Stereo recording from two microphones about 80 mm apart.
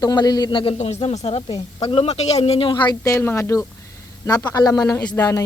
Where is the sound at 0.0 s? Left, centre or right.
Left.